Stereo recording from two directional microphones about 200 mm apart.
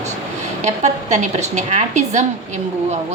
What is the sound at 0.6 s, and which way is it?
A woman's voice, 35° right (ahead or behind).